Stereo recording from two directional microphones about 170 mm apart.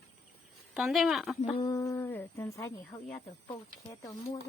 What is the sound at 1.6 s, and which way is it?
Speech, 20° left (ahead or behind).